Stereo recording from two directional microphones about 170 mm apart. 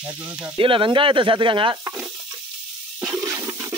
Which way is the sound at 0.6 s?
30° right (ahead or behind).